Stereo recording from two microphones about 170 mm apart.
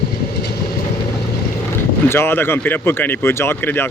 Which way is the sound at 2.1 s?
15° left (ahead or behind).